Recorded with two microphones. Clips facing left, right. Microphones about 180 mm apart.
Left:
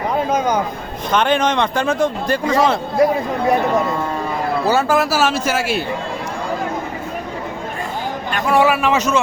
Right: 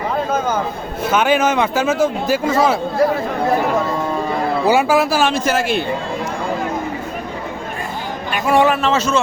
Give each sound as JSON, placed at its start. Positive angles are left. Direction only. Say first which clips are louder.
{"t": 0.3, "sound": "a man's voice", "louder": "left 2 dB", "side_deg": 15}
{"t": 1.1, "sound": "speech", "louder": "right 1 dB", "side_deg": -5}
{"t": 4.6, "sound": "speech", "louder": "right 2 dB", "side_deg": -10}
{"t": 4.9, "sound": "speech", "louder": "right 1 dB", "side_deg": 5}
{"t": 8.3, "sound": "speech", "louder": "right 1 dB", "side_deg": -5}
{"t": 8.6, "sound": "a man's voice", "louder": "even", "side_deg": 10}